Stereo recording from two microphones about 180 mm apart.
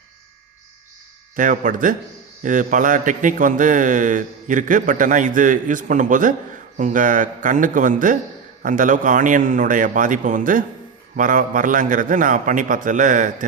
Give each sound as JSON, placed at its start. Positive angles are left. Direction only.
{"t": 1.4, "sound": "a man's voice", "side_deg": -45}